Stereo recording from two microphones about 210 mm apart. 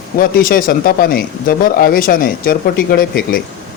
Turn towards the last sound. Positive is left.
turn(degrees=45)  # may be behind; listen again after turning